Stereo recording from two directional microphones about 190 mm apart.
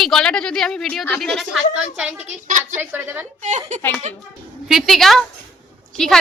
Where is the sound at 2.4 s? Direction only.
45° right (ahead or behind).